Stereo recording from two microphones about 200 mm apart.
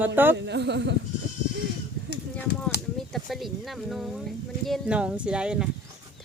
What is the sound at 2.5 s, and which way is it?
Speech, 55° left (ahead or behind).